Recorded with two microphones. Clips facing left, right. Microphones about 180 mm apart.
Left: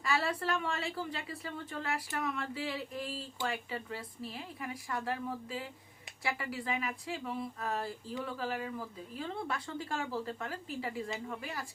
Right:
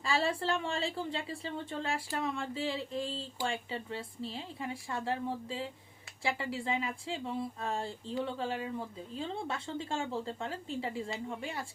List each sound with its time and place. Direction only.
0.0 s speech: 25° right (ahead or behind)